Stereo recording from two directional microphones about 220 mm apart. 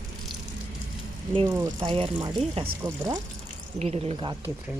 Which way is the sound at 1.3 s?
15° right (ahead or behind).